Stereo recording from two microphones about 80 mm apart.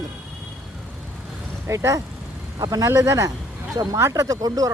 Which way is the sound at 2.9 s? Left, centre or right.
Right.